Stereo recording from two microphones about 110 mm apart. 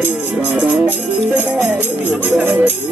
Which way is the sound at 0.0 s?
15° right (ahead or behind).